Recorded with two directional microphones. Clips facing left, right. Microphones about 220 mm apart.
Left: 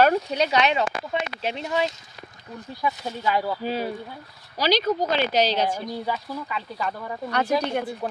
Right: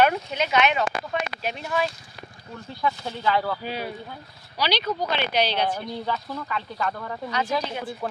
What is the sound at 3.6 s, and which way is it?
Speech, 40° left (ahead or behind).